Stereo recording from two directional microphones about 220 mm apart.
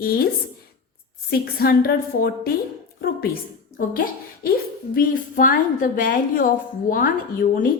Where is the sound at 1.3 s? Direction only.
45° left (ahead or behind).